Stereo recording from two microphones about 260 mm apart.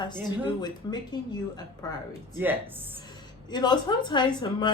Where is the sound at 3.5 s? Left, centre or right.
Centre.